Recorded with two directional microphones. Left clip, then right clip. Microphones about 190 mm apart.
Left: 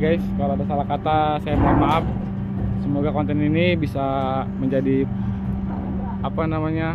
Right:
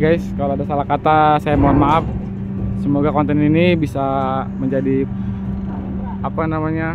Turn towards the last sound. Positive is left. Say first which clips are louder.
# right 2 dB
turn(degrees=-10)  # may be behind; listen again after turning